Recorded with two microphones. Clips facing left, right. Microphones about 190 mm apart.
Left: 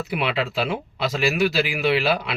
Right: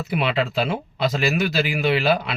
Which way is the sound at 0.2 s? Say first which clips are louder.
Right 3 dB; 40° right (ahead or behind).